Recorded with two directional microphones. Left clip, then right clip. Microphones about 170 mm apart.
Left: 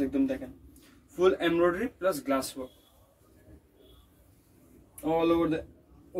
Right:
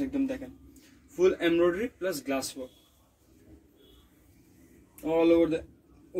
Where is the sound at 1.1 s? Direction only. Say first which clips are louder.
Even; 5° right (ahead or behind).